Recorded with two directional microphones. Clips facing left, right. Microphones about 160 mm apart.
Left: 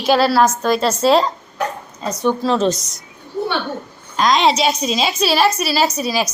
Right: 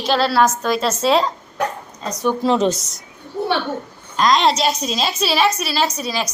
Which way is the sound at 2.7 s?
5° right (ahead or behind).